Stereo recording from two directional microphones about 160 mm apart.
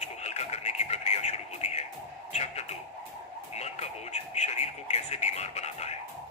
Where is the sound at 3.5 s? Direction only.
45° left (ahead or behind).